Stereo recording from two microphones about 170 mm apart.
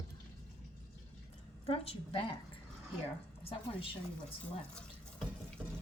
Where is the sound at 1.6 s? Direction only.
35° left (ahead or behind).